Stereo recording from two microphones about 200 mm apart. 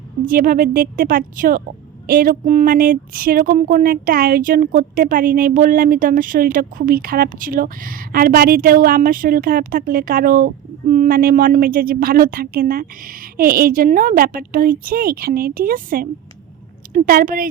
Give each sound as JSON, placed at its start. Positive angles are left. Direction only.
{"t": 0.3, "sound": "speech", "side_deg": -45}